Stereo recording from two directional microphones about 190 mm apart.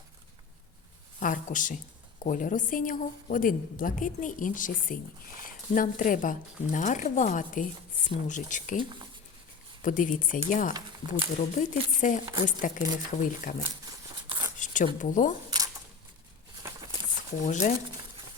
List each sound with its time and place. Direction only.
1.2 s a woman's voice: 45° left (ahead or behind)
8.8 s speech: 25° right (ahead or behind)
9.8 s a woman's voice: 45° left (ahead or behind)
12.2 s speech: 25° right (ahead or behind)
12.5 s a woman's voice: 45° left (ahead or behind)
14.2 s a sound: 25° right (ahead or behind)
14.6 s a sound: 40° left (ahead or behind)
15.0 s a woman's voice: 40° left (ahead or behind)
17.4 s speech: 40° left (ahead or behind)
17.7 s a sound: 20° right (ahead or behind)